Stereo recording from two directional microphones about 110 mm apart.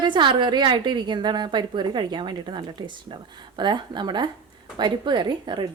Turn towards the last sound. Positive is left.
turn(degrees=-45)  # may be behind; listen again after turning